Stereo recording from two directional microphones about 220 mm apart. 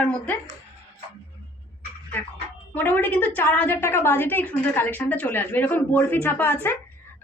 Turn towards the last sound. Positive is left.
turn(degrees=10)  # may be behind; listen again after turning